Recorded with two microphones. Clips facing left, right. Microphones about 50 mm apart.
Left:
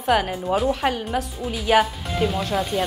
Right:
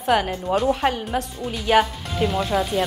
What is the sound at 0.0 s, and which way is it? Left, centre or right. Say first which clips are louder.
Speech: even; centre.